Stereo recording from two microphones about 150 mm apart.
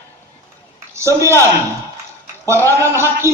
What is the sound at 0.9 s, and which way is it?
Speech, 20° right (ahead or behind).